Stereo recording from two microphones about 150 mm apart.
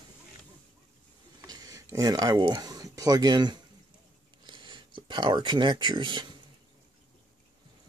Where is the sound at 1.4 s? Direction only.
25° right (ahead or behind).